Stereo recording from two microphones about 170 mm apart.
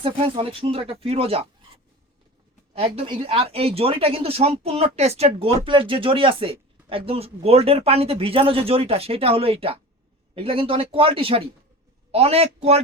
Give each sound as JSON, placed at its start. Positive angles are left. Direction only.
{"t": 0.0, "sound": "speech", "side_deg": -35}
{"t": 2.7, "sound": "speech", "side_deg": -35}